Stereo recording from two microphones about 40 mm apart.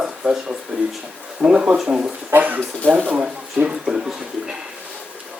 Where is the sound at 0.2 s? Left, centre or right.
Right.